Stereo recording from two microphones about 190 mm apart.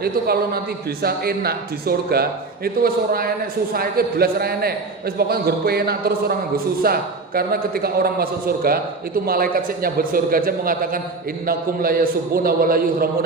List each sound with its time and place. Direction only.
0.0 s a man's voice: 55° right (ahead or behind)